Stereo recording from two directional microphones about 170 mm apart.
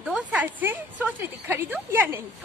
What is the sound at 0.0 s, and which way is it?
A woman's voice, 5° right (ahead or behind).